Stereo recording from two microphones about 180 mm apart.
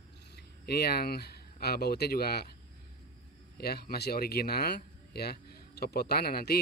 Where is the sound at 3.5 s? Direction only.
60° left (ahead or behind).